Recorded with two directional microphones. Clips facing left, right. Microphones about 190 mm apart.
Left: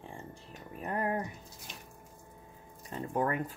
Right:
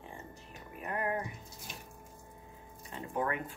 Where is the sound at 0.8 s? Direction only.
35° left (ahead or behind).